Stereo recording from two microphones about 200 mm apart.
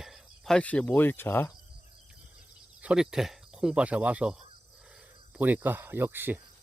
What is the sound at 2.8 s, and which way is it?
Speech, 5° right (ahead or behind).